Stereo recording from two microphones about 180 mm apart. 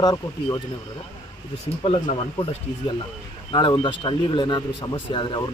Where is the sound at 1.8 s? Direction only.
30° left (ahead or behind).